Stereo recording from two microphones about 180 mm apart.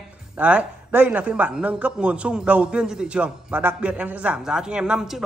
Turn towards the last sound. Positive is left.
turn(degrees=-5)  # may be behind; listen again after turning